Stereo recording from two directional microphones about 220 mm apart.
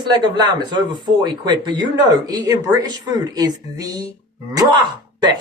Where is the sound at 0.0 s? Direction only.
20° right (ahead or behind).